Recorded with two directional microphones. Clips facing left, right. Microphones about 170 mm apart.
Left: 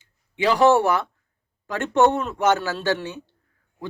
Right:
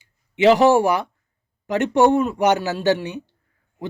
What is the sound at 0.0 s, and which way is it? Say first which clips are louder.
Speech: right 7 dB; 20° right (ahead or behind).